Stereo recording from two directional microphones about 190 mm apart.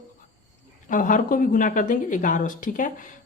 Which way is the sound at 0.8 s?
45° left (ahead or behind).